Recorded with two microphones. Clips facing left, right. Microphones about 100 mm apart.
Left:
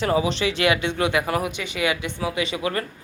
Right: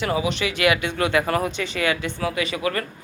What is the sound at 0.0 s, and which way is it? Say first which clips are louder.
Speech: left 2 dB; 30° left (ahead or behind).